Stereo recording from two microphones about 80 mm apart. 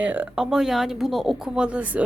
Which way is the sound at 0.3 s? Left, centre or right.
Centre.